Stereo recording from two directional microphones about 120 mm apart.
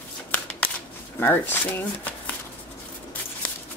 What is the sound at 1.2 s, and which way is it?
Speech, 15° left (ahead or behind).